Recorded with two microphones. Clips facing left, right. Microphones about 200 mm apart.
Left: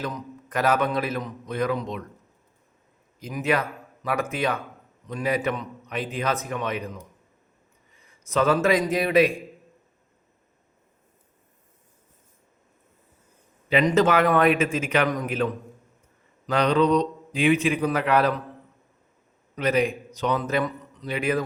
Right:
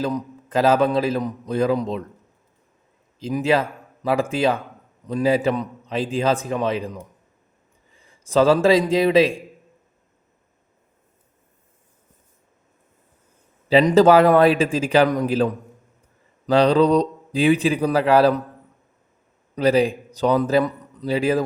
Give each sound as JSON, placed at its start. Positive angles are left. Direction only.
{"t": 0.0, "sound": "a man's voice", "side_deg": -30}
{"t": 3.2, "sound": "a man's voice", "side_deg": -30}
{"t": 13.7, "sound": "speech", "side_deg": -30}
{"t": 16.5, "sound": "speech", "side_deg": -30}
{"t": 19.5, "sound": "a man's voice", "side_deg": -30}